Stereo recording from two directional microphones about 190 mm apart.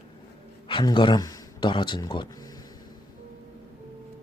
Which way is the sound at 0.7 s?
25° left (ahead or behind).